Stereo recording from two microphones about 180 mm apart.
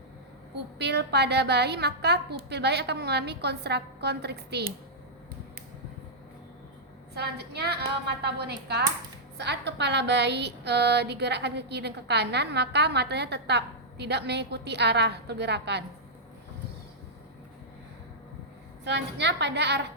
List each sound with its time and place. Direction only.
0.8 s speech: 70° right (ahead or behind)
7.1 s a woman's voice: 65° right (ahead or behind)
18.9 s speech: 75° right (ahead or behind)